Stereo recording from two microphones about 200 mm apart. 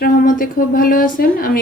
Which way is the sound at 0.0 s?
45° left (ahead or behind).